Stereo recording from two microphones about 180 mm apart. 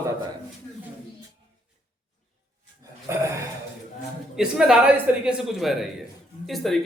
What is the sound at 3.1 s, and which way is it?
Burping, 15° right (ahead or behind).